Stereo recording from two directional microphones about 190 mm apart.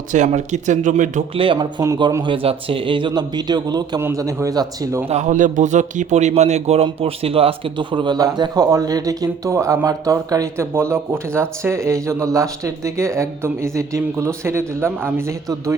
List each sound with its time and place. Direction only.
0.1 s speech: 40° right (ahead or behind)
1.4 s a man's voice: 25° right (ahead or behind)
5.0 s a man's voice: 40° right (ahead or behind); by 15.7 s 15° right (ahead or behind)